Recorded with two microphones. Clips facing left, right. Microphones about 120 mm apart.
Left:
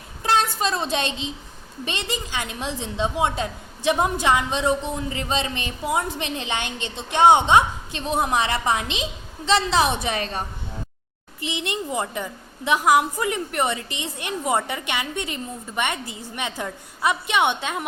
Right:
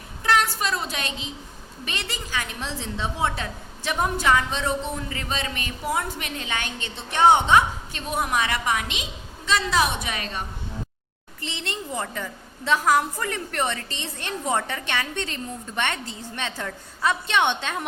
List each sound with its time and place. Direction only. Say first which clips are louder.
0.2 s a woman's voice: left 1 dB; 25° left (ahead or behind)
11.3 s a woman's voice: left 5 dB; 15° left (ahead or behind)